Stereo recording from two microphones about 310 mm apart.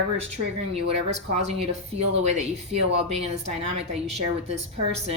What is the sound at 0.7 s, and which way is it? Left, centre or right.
Speech, centre.